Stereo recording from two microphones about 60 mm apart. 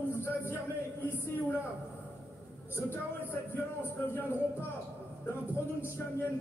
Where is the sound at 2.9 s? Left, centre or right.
Left.